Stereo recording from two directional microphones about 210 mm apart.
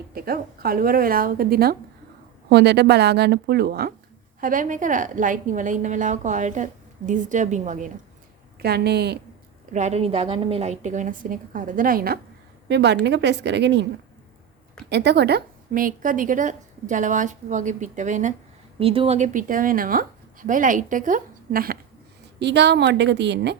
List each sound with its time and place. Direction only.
0.1 s a woman's voice: 45° right (ahead or behind)
8.6 s speech: 50° right (ahead or behind)
9.7 s a woman's voice: 30° right (ahead or behind); by 13.8 s 55° right (ahead or behind)
14.8 s a woman's voice: 55° right (ahead or behind)
22.4 s a woman's voice: 55° right (ahead or behind)